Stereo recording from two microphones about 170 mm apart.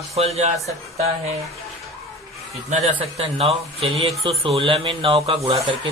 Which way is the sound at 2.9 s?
35° right (ahead or behind).